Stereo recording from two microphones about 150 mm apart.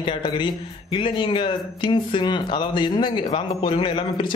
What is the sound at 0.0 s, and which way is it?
Speech, 35° left (ahead or behind).